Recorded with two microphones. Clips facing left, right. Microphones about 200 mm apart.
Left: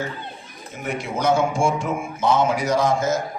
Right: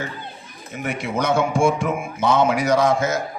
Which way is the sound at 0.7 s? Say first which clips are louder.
Right 2 dB; 65° right (ahead or behind).